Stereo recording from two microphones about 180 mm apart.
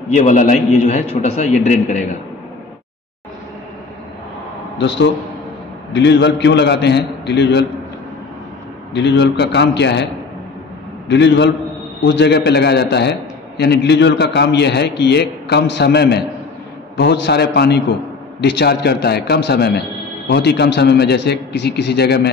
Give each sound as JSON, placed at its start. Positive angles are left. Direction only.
{"t": 0.1, "sound": "a man's voice", "side_deg": 40}
{"t": 4.7, "sound": "a man's voice", "side_deg": 80}
{"t": 8.9, "sound": "a man's voice", "side_deg": 75}
{"t": 11.1, "sound": "a man's voice", "side_deg": 75}